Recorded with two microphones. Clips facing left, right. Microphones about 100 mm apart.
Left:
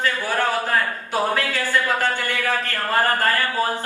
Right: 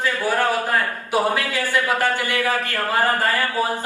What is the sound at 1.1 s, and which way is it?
A man's voice, 15° right (ahead or behind).